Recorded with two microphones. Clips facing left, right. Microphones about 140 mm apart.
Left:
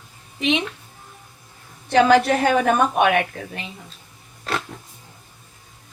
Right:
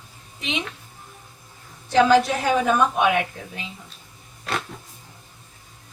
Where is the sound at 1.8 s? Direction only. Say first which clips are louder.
Left 2 dB; 65° left (ahead or behind).